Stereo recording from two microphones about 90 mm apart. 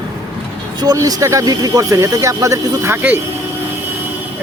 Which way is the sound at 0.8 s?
45° right (ahead or behind).